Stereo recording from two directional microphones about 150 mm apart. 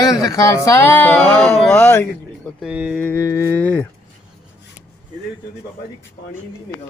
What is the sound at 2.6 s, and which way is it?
Speech, 5° right (ahead or behind).